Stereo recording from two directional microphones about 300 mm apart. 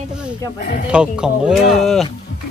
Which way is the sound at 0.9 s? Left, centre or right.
Centre.